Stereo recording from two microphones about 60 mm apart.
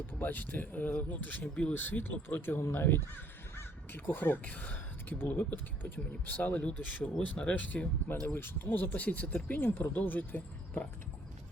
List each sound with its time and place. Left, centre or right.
0.2 s speech: left
8.9 s speech: left
9.6 s speech: left